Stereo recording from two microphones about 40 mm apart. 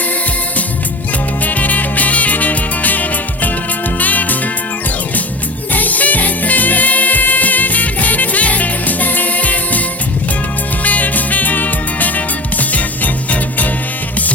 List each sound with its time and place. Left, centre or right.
1.5 s music: left
5.7 s music: left
10.8 s music: left